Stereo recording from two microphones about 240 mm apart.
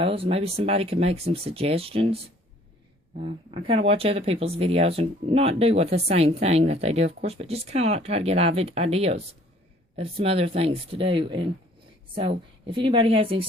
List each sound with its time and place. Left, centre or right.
0.0 s speech: right
3.2 s speech: right